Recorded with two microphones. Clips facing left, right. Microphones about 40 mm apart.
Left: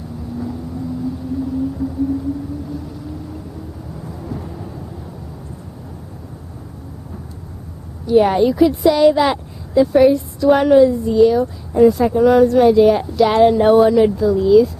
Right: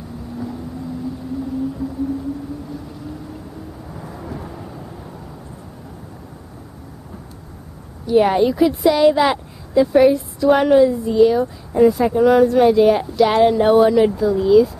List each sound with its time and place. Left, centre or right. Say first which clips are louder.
8.1 s speech: left 1 dB; centre